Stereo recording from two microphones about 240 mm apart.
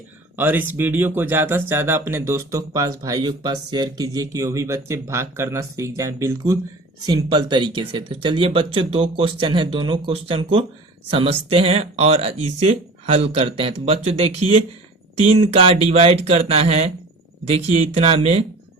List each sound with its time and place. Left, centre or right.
0.3 s speech: centre; by 18.4 s right